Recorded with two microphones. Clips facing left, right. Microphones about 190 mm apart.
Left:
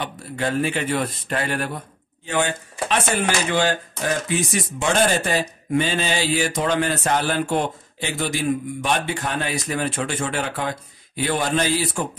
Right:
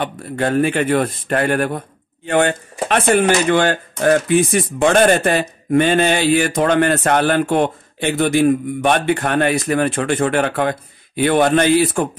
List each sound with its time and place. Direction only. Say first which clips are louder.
0.0 s speech: right 6 dB; 55° right (ahead or behind)